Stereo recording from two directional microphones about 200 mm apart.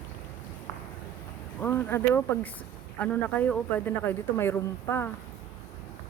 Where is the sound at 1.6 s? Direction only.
10° left (ahead or behind).